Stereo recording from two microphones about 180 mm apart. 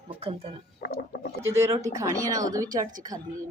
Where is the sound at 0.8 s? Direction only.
55° left (ahead or behind).